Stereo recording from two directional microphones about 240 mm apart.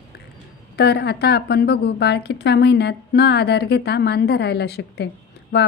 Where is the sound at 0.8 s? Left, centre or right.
Left.